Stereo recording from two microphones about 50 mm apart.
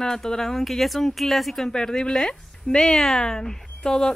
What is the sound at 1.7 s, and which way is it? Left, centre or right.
Speech, centre.